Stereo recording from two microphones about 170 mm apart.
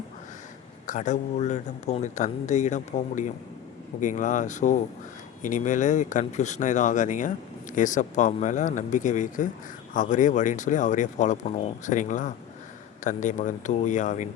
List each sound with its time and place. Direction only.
0.9 s speech: 45° left (ahead or behind)